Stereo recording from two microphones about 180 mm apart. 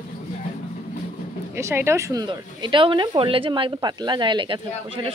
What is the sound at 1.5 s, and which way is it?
A woman's voice, 15° right (ahead or behind).